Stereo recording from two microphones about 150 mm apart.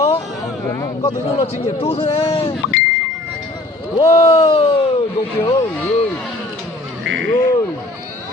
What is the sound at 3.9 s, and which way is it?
Speech, 25° left (ahead or behind).